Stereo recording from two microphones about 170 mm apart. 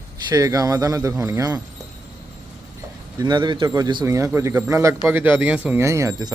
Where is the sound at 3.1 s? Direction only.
25° right (ahead or behind).